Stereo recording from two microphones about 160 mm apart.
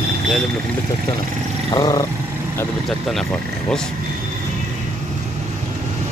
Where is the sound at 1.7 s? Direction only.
25° left (ahead or behind).